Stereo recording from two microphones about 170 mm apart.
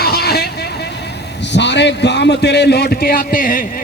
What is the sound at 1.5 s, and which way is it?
A man's voice, 90° left.